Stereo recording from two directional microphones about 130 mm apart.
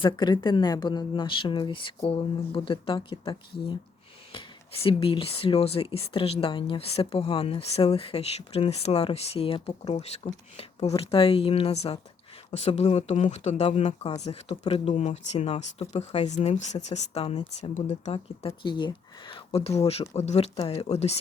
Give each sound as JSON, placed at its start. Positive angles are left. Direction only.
{"t": 0.0, "sound": "speech", "side_deg": 35}